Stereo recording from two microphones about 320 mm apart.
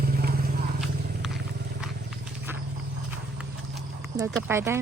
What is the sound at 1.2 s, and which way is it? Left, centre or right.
Vehicle, centre.